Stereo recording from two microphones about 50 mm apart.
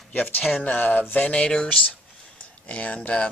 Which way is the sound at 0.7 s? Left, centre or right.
Left.